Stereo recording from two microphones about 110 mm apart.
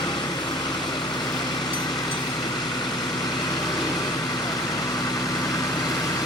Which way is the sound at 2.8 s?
40° left (ahead or behind).